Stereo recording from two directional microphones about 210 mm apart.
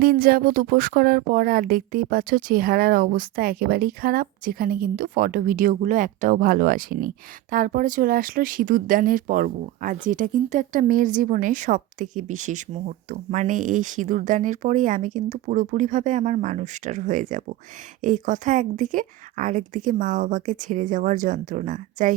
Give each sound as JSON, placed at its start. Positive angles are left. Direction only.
{"t": 0.0, "sound": "speech", "side_deg": -45}